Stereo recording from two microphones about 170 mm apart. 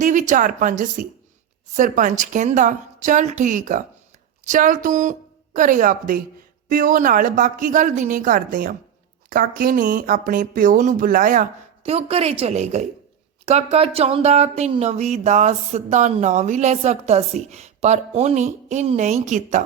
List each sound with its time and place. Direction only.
0.0 s a woman's voice: 45° right (ahead or behind)
11.8 s speech: 35° right (ahead or behind)